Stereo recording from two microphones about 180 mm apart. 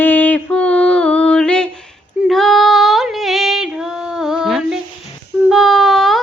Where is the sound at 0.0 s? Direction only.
10° left (ahead or behind).